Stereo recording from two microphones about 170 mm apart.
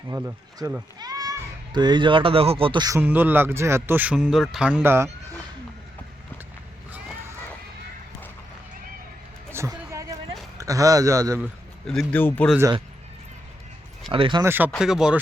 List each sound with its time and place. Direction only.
0.1 s a child's voice: 20° right (ahead or behind)
3.0 s speech: 10° right (ahead or behind)
9.5 s a sound: 15° right (ahead or behind)
10.6 s speech: 20° right (ahead or behind)
11.9 s speech: 5° left (ahead or behind)
14.1 s speech: 30° right (ahead or behind)
14.4 s speech: 10° right (ahead or behind)